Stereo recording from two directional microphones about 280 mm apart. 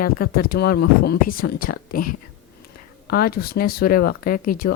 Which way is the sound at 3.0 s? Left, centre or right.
Left.